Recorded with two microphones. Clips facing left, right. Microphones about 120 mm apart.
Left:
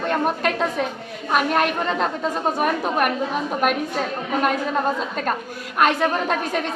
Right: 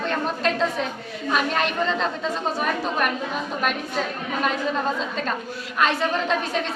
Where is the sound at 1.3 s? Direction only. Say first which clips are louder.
Left 4 dB; 55° left (ahead or behind).